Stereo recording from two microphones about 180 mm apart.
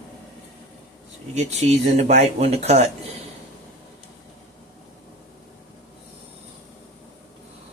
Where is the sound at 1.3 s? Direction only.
40° right (ahead or behind).